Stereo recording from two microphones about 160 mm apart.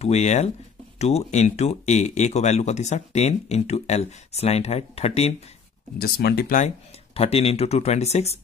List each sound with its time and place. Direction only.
0.0 s speech: 45° left (ahead or behind)
5.9 s speech: 80° left
7.2 s speech: 40° left (ahead or behind)